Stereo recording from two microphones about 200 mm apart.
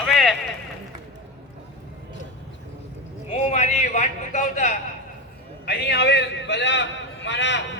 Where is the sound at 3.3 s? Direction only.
35° left (ahead or behind).